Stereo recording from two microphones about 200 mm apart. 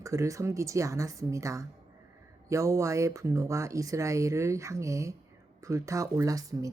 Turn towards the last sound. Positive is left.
turn(degrees=-15)  # may be behind; listen again after turning